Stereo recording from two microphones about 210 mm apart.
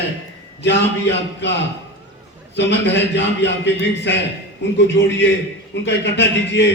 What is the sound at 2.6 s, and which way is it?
A man's voice, 55° left (ahead or behind).